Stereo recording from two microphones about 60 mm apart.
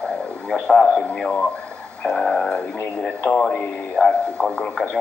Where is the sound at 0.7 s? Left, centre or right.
Centre.